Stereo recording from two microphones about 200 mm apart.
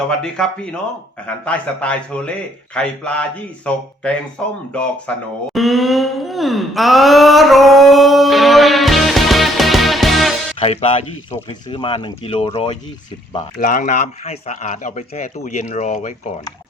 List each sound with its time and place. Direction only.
0.1 s a man's voice: 5° left (ahead or behind)
5.5 s a sound: centre (ahead or behind)
10.6 s speech: 30° left (ahead or behind)
13.6 s speech: 40° left (ahead or behind)